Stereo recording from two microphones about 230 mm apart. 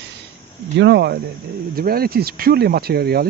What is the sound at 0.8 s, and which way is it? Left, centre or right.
Speech, right.